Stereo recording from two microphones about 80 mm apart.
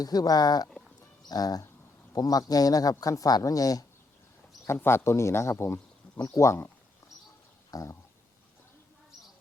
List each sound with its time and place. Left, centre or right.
0.0 s speech: left
4.6 s speech: left
7.7 s a sound: left